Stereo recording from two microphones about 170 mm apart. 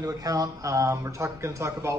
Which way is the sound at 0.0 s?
20° right (ahead or behind).